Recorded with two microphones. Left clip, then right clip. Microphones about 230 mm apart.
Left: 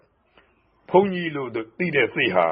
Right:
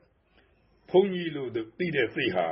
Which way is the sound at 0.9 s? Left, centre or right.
Centre.